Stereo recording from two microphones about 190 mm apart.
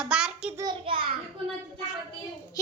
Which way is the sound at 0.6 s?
25° right (ahead or behind).